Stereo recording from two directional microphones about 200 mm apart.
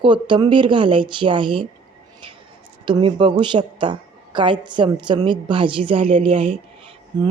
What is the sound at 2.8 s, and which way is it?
A woman's voice, 25° right (ahead or behind).